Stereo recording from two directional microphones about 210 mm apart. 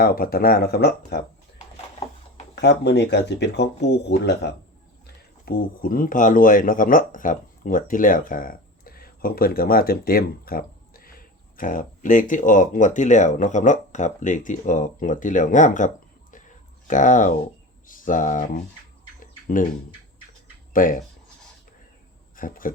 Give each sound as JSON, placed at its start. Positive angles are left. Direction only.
{"t": 0.0, "sound": "speech", "side_deg": 45}
{"t": 2.6, "sound": "speech", "side_deg": 55}
{"t": 19.2, "sound": "bird", "side_deg": 40}
{"t": 20.7, "sound": "speech", "side_deg": 40}
{"t": 22.4, "sound": "speech", "side_deg": 40}